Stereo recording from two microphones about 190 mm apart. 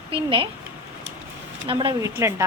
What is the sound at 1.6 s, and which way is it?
Speech, 25° right (ahead or behind).